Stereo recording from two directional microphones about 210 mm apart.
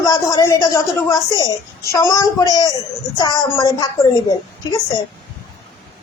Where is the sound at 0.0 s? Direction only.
15° left (ahead or behind).